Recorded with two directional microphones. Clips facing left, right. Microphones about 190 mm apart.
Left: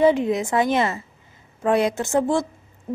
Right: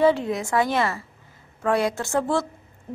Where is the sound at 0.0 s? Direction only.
20° left (ahead or behind).